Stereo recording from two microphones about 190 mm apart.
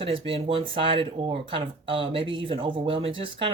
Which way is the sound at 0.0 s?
30° right (ahead or behind).